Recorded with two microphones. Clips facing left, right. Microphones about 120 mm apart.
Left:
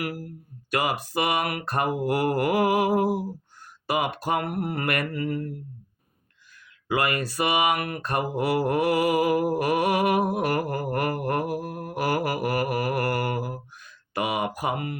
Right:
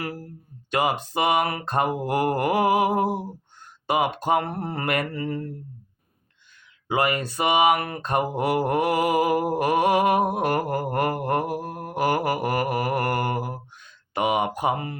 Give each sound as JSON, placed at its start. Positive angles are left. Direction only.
{"t": 0.0, "sound": "mantra", "side_deg": -25}
{"t": 6.8, "sound": "mantra", "side_deg": -25}